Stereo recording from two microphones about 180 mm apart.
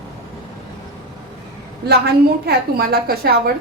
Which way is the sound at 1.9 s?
65° right (ahead or behind).